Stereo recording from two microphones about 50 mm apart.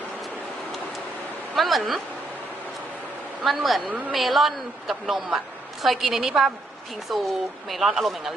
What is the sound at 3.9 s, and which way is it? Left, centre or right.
Speech, right.